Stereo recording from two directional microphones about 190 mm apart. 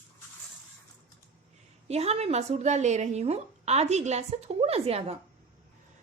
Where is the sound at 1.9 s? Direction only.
35° right (ahead or behind).